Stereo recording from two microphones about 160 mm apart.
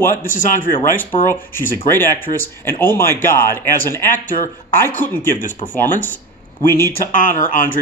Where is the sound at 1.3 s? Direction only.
15° left (ahead or behind).